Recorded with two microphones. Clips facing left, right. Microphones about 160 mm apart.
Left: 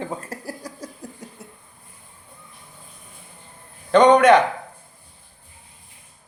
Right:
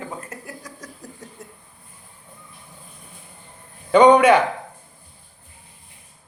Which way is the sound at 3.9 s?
10° right (ahead or behind).